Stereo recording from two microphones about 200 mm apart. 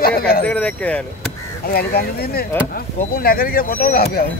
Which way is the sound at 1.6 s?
50° left (ahead or behind).